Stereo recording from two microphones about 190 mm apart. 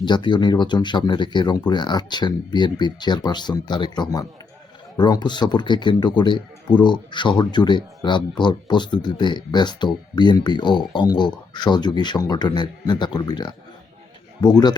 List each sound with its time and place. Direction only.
0.0 s speech: 25° left (ahead or behind)